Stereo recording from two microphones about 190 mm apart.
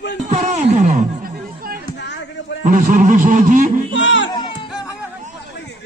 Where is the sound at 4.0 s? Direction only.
80° left.